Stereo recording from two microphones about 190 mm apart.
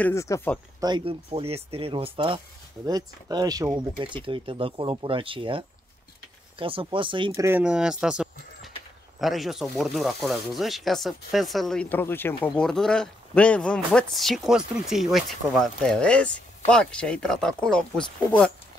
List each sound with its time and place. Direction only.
0.0 s speech: 15° left (ahead or behind)
0.7 s speech: 20° right (ahead or behind)
7.4 s speech: 10° right (ahead or behind)